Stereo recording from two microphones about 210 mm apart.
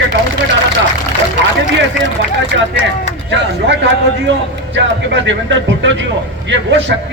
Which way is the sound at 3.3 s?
60° right (ahead or behind).